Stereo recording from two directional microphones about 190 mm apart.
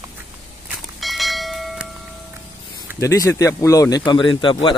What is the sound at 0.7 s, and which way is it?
Church bell, centre (ahead or behind).